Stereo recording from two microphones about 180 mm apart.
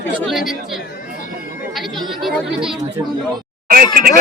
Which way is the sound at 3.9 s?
55° right (ahead or behind).